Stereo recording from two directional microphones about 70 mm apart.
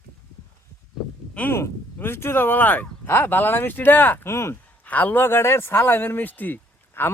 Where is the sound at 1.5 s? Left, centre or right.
Left.